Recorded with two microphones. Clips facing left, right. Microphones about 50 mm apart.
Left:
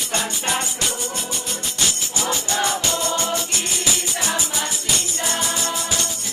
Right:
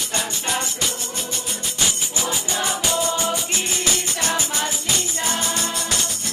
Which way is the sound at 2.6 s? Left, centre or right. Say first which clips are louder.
Right 1 dB; centre.